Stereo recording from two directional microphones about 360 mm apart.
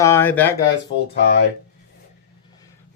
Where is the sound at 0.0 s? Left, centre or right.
Centre.